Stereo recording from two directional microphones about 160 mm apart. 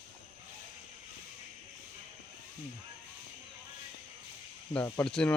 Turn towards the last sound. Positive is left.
turn(degrees=5)  # may be behind; listen again after turning